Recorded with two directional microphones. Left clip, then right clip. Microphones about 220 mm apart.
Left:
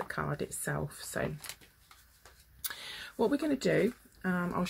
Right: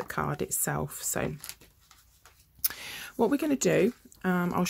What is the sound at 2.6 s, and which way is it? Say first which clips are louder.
Speech: right 3 dB; 35° right (ahead or behind).